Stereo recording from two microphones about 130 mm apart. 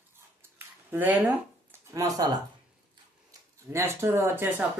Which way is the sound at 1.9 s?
25° right (ahead or behind).